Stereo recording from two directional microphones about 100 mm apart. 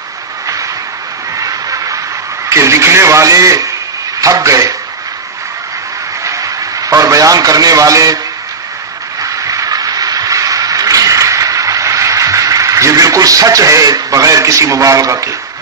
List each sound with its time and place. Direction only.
1.4 s music: 35° right (ahead or behind)
2.5 s a man's voice: 30° right (ahead or behind)
6.2 s a man's voice: 35° right (ahead or behind)
9.2 s a sound: 35° right (ahead or behind)